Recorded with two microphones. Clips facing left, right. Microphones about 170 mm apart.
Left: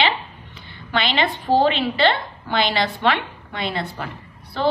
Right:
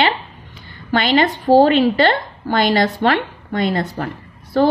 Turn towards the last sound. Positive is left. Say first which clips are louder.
# right 10 dB
turn(degrees=-45)  # may be behind; listen again after turning